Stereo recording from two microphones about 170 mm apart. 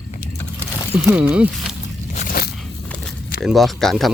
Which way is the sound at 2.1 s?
60° left (ahead or behind).